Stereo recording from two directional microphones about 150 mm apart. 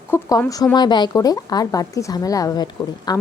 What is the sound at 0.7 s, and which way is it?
Speech, 30° left (ahead or behind).